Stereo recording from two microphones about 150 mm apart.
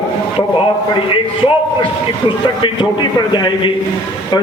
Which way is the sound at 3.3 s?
35° left (ahead or behind).